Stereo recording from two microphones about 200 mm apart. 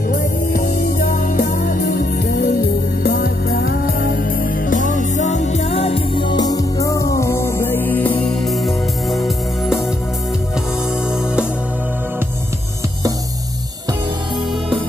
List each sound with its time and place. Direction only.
0.5 s music: 50° left (ahead or behind); by 9.2 s centre (ahead or behind)